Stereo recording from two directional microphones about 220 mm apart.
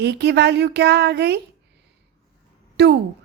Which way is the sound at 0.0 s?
50° right (ahead or behind).